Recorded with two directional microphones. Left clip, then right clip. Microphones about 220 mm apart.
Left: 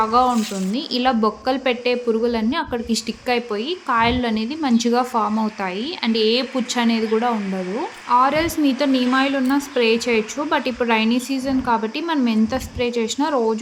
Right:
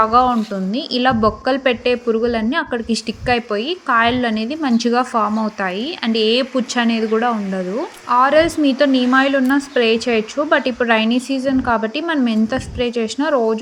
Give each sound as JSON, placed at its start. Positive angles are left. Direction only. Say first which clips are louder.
{"t": 0.0, "sound": "speech", "louder": "right 3 dB", "side_deg": -15}